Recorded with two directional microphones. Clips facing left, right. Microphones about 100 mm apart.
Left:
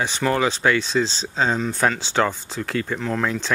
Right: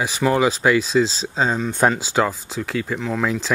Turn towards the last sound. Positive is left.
turn(degrees=-5)  # may be behind; listen again after turning